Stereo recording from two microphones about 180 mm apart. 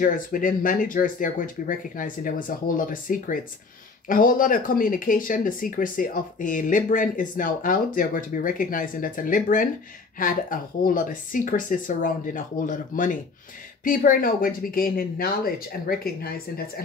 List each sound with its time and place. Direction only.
0.0 s speech: 50° left (ahead or behind)